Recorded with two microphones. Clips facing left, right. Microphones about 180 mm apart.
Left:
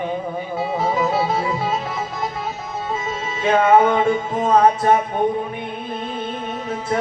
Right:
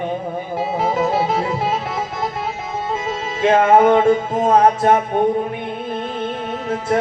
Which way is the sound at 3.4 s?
50° right (ahead or behind).